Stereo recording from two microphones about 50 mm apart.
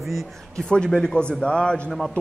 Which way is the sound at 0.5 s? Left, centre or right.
Centre.